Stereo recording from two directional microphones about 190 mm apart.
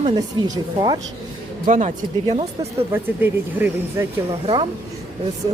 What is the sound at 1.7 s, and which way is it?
Speech, 40° right (ahead or behind).